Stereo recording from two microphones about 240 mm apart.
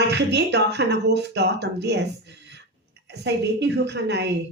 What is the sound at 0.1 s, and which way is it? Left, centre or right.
A woman's voice, right.